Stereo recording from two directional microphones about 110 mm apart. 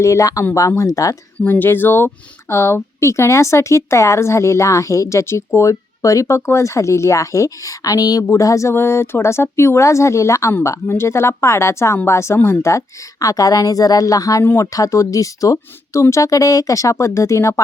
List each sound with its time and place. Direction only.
0.0 s speech: 30° left (ahead or behind)
1.4 s a woman's voice: 20° left (ahead or behind)